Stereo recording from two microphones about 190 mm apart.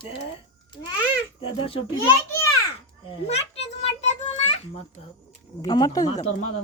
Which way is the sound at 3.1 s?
30° left (ahead or behind).